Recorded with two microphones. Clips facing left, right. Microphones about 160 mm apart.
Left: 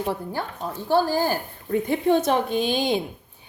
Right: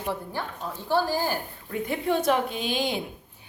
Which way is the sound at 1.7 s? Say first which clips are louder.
Left 6 dB; 30° left (ahead or behind).